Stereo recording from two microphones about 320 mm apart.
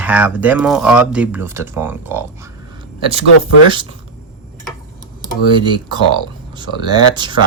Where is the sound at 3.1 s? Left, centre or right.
Centre.